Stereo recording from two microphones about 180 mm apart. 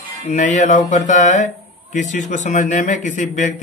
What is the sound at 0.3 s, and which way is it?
A man's voice, 40° left (ahead or behind).